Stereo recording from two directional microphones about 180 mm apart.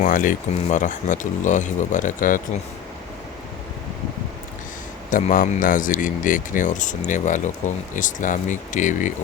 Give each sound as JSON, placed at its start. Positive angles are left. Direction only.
{"t": 0.0, "sound": "speech", "side_deg": 45}
{"t": 5.1, "sound": "speech", "side_deg": 45}